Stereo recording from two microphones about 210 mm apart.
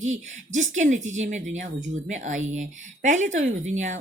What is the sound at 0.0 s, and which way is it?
Speech, 35° right (ahead or behind).